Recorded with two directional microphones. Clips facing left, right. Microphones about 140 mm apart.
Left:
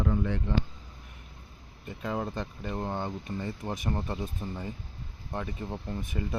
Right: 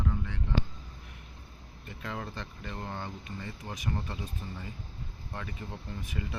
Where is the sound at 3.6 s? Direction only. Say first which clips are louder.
Left 2 dB; 35° left (ahead or behind).